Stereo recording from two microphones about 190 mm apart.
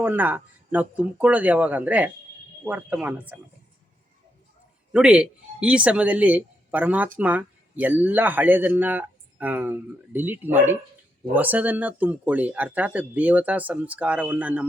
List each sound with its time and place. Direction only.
0.0 s speech: 10° right (ahead or behind)
4.9 s speech: 5° right (ahead or behind)